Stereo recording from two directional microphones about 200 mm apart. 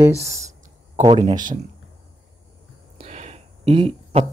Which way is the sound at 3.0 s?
35° right (ahead or behind).